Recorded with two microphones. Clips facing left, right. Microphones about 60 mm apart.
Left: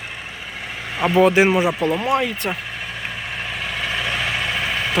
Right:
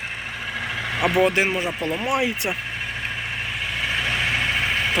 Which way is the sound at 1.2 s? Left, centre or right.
Centre.